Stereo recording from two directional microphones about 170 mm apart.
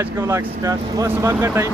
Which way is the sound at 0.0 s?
20° right (ahead or behind).